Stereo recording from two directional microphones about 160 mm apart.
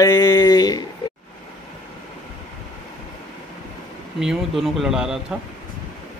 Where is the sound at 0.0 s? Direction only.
25° left (ahead or behind).